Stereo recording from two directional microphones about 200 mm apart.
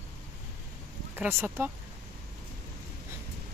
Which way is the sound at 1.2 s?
10° right (ahead or behind).